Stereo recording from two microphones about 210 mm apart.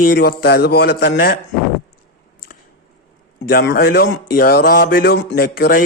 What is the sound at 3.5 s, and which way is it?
A man's voice, 45° left (ahead or behind).